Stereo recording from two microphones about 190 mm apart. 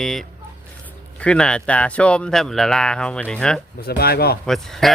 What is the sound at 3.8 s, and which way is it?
Speech, 55° left (ahead or behind).